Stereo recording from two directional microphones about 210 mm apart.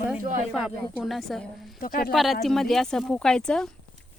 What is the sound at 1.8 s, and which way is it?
Speech, 45° left (ahead or behind).